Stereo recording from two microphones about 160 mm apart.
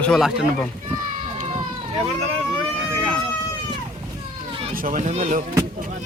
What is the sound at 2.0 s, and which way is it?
Speech, 30° right (ahead or behind).